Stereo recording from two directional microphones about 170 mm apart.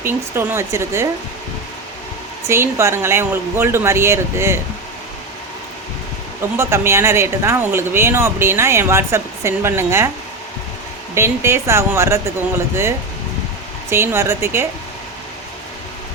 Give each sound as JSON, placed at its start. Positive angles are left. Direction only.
{"t": 0.1, "sound": "speech", "side_deg": -15}
{"t": 2.5, "sound": "speech", "side_deg": -15}
{"t": 6.6, "sound": "speech", "side_deg": -15}
{"t": 11.1, "sound": "speech", "side_deg": -15}
{"t": 13.9, "sound": "speech", "side_deg": -15}